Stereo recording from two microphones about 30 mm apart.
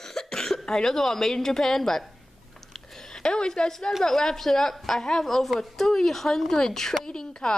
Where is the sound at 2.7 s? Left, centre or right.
Centre.